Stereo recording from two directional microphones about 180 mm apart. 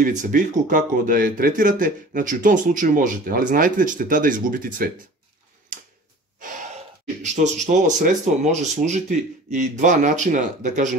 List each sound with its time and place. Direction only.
0.0 s speech: 45° right (ahead or behind)
5.7 s a sound: 50° right (ahead or behind)
7.6 s speech: 45° right (ahead or behind)